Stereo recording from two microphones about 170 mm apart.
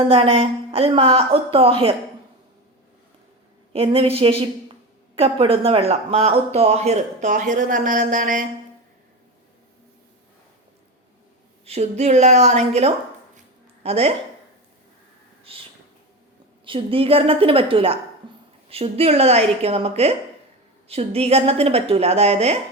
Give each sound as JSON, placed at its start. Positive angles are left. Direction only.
{"t": 0.1, "sound": "speech", "side_deg": -35}
{"t": 3.7, "sound": "speech", "side_deg": -35}
{"t": 11.6, "sound": "speech", "side_deg": -40}
{"t": 16.6, "sound": "speech", "side_deg": -30}
{"t": 18.2, "sound": "a sound", "side_deg": -30}
{"t": 18.7, "sound": "speech", "side_deg": -35}